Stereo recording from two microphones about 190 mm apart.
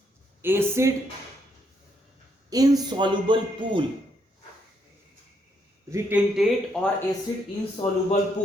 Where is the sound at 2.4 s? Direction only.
20° right (ahead or behind).